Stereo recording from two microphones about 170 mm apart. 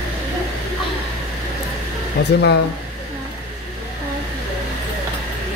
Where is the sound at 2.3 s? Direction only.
80° left.